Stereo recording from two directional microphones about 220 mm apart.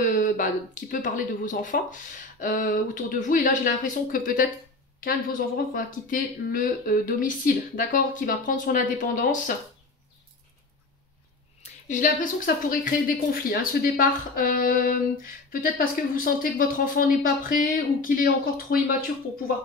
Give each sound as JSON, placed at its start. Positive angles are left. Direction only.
{"t": 0.0, "sound": "speech", "side_deg": 35}
{"t": 11.6, "sound": "speech", "side_deg": 35}